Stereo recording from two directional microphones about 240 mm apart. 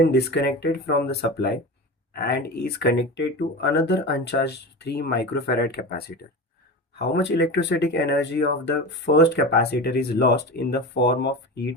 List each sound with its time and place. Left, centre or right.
0.0 s speech: left